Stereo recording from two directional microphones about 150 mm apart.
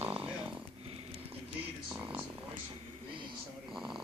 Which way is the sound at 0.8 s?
40° right (ahead or behind).